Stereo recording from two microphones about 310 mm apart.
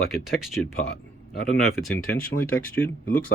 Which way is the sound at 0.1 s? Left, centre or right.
Centre.